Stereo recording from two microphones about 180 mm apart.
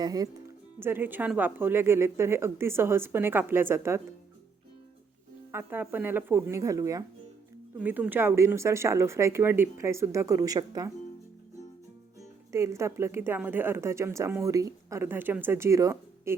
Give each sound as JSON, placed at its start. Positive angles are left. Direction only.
{"t": 0.0, "sound": "a woman's voice", "side_deg": -20}
{"t": 5.5, "sound": "a woman's voice", "side_deg": -10}
{"t": 12.5, "sound": "a woman's voice", "side_deg": -15}